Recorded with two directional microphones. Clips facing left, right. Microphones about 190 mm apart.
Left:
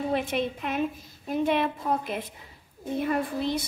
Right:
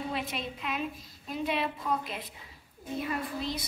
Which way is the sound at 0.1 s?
50° left (ahead or behind).